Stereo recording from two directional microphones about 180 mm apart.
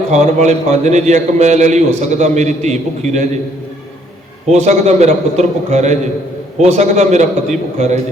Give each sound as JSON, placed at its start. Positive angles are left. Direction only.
{"t": 0.1, "sound": "a man's voice", "side_deg": -40}
{"t": 4.4, "sound": "a man's voice", "side_deg": -40}